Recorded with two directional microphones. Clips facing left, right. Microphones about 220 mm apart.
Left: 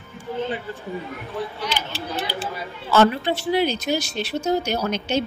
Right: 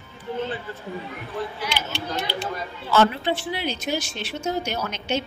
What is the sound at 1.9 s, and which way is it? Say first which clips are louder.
Speech: even; centre (ahead or behind).